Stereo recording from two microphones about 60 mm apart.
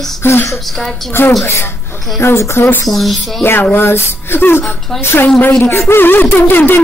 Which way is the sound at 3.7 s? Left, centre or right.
Left.